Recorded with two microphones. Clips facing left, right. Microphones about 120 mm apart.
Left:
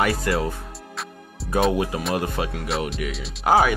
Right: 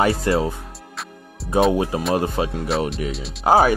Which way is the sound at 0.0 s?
30° right (ahead or behind).